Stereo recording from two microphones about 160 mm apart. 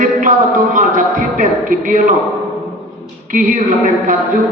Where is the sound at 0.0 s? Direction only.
55° right (ahead or behind).